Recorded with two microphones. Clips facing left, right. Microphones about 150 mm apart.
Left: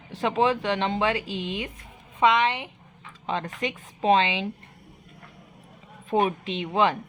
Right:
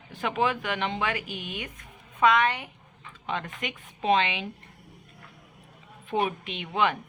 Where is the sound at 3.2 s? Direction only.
35° left (ahead or behind).